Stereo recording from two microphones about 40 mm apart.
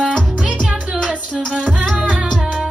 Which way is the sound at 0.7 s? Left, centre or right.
Centre.